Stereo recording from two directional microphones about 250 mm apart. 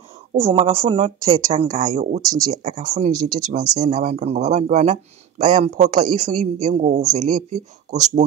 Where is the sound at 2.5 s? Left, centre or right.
Right.